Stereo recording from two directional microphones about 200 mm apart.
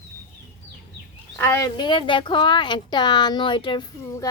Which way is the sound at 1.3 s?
10° left (ahead or behind).